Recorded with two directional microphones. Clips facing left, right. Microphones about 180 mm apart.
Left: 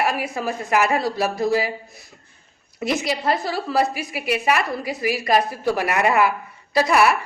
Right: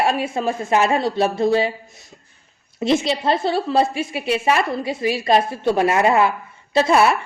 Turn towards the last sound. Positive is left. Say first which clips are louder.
# right 2 dB
turn(degrees=-25)  # may be behind; listen again after turning